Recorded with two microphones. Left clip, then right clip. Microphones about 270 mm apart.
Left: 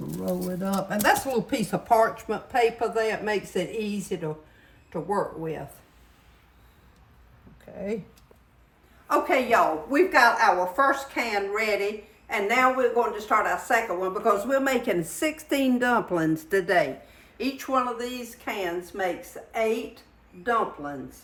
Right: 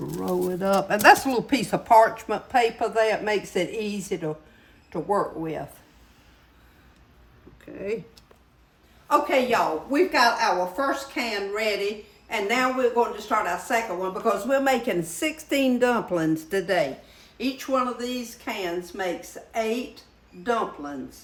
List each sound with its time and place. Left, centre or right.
0.4 s speech: right
0.9 s speech: centre
9.0 s speech: centre